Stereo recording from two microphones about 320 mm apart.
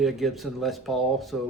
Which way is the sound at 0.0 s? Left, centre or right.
Centre.